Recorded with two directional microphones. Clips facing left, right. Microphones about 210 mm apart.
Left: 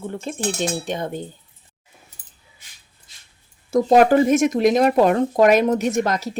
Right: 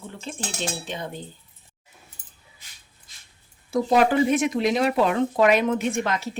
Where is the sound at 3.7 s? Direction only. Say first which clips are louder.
Left 6 dB; 45° left (ahead or behind).